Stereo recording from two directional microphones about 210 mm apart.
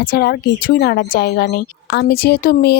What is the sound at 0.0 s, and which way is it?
A woman's voice, 50° left (ahead or behind).